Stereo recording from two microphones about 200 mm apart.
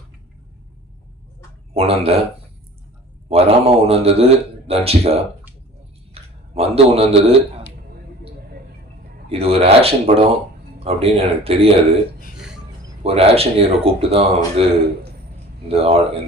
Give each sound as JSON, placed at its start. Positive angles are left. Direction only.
{"t": 1.7, "sound": "a man's voice", "side_deg": -30}
{"t": 3.2, "sound": "a man's voice", "side_deg": -30}
{"t": 9.3, "sound": "a man's voice", "side_deg": -30}
{"t": 12.4, "sound": "a sound", "side_deg": -5}
{"t": 13.0, "sound": "speech", "side_deg": -30}
{"t": 15.7, "sound": "speech", "side_deg": -30}